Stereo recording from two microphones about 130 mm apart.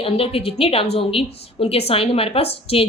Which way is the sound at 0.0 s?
45° left (ahead or behind).